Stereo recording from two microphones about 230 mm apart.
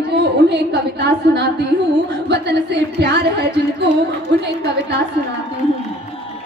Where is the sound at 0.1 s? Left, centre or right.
Right.